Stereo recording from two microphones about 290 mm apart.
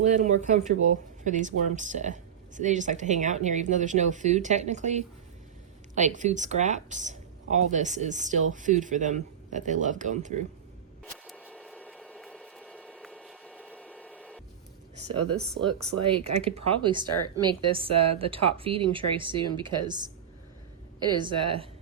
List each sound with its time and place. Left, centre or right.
0.0 s speech: right
11.0 s a sound: centre
14.9 s a woman's voice: right
21.2 s a woman's voice: centre